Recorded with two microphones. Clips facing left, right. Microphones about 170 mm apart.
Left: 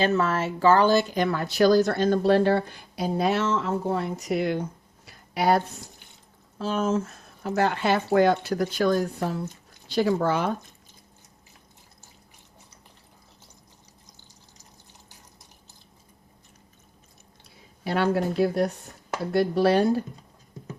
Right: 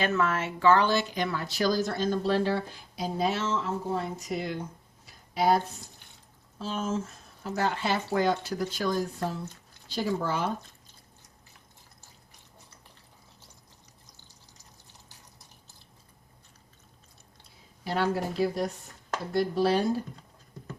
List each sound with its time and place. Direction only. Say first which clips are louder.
0.0 s speech: left 4 dB; 35° left (ahead or behind); by 4.6 s 70° left (ahead or behind)
5.0 s a sound: left 2 dB; 70° left (ahead or behind)
6.6 s speech: left 6 dB; 70° left (ahead or behind)
17.8 s speech: left 4 dB; 60° left (ahead or behind)